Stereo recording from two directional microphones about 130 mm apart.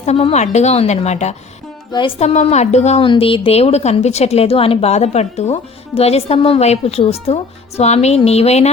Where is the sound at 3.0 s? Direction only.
40° left (ahead or behind).